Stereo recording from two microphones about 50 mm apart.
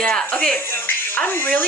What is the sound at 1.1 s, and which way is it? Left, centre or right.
Speech, left.